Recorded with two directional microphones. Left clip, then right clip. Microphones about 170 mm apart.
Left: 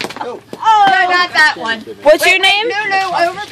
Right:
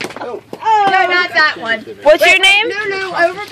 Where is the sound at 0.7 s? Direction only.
40° left (ahead or behind).